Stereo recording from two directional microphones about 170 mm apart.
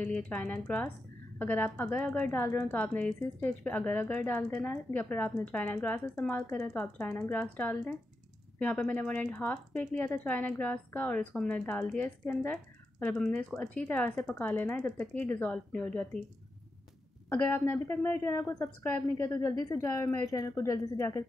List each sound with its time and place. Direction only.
0.0 s speech: 5° left (ahead or behind)
17.3 s speech: 10° left (ahead or behind)